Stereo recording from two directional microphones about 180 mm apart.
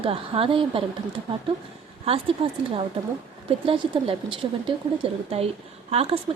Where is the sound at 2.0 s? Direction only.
30° right (ahead or behind).